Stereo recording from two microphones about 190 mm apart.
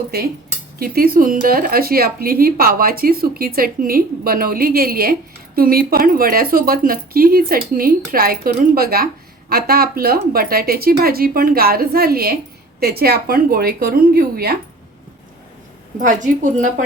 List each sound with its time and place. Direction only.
0.1 s speech: 55° right (ahead or behind)
16.0 s speech: 40° right (ahead or behind)